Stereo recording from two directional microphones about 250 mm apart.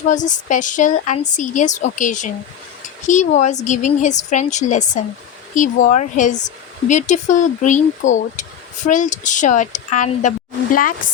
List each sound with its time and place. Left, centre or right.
0.1 s a woman's voice: left